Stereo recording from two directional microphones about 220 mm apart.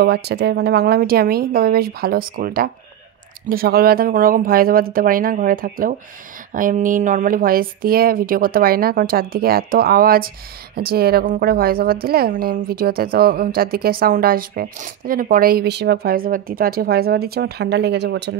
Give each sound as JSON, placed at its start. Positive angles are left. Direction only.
{"t": 0.0, "sound": "a woman's voice", "side_deg": -50}